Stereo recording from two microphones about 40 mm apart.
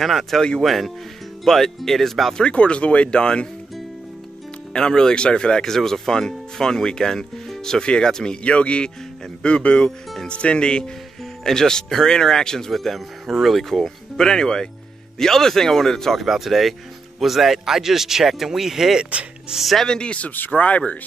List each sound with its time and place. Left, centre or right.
0.0 s speech: centre
2.3 s speech: left
4.7 s speech: centre
5.7 s speech: centre
7.8 s speech: left
8.5 s speech: left
11.4 s speech: centre
16.2 s speech: centre
19.9 s speech: left
20.2 s speech: left